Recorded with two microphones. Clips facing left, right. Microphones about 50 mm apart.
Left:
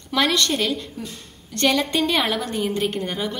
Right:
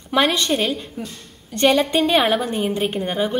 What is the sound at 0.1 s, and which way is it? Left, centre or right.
A woman's voice, centre.